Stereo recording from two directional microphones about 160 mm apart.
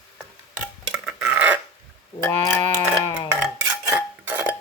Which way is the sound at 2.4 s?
15° left (ahead or behind).